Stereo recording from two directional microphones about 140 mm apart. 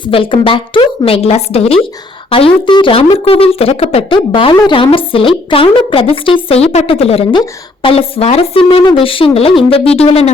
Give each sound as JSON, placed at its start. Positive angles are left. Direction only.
{"t": 0.0, "sound": "a woman's voice", "side_deg": 40}